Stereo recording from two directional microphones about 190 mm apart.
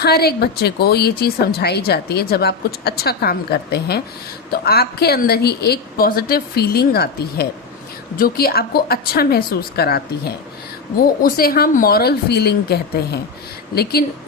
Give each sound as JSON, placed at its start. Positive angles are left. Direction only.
{"t": 0.0, "sound": "a woman's voice", "side_deg": 55}